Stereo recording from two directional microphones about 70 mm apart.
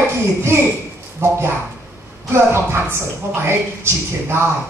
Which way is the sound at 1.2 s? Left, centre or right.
Right.